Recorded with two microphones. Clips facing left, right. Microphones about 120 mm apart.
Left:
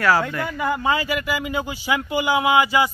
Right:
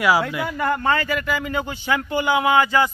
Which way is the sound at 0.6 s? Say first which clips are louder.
Right 1 dB; 5° left (ahead or behind).